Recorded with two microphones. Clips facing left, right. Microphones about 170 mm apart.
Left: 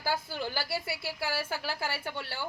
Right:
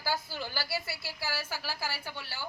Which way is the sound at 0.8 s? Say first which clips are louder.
Left 4 dB; 55° left (ahead or behind).